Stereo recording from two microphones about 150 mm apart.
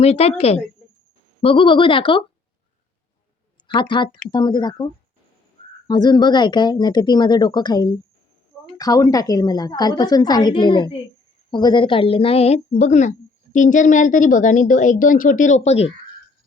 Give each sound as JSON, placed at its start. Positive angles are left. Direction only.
{"t": 0.0, "sound": "a woman's voice", "side_deg": 45}
{"t": 3.7, "sound": "speech", "side_deg": 30}
{"t": 5.9, "sound": "a woman's voice", "side_deg": 30}